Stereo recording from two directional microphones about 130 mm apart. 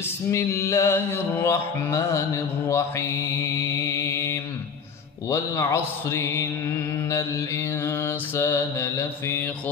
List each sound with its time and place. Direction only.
0.3 s mantra: 20° left (ahead or behind)